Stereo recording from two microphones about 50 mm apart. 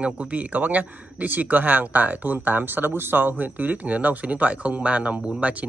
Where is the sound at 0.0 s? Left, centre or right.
Right.